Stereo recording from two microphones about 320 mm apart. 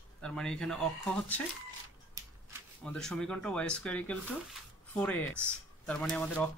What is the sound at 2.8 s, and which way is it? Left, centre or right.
Speech, centre.